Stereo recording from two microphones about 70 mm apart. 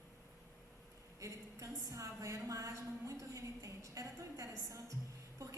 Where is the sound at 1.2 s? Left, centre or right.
Right.